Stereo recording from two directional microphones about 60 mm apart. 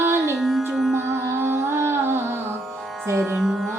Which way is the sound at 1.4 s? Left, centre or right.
Right.